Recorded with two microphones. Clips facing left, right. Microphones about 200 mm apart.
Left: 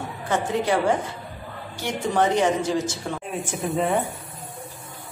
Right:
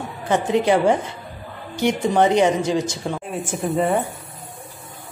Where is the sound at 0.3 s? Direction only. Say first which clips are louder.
Right 5 dB; 20° right (ahead or behind).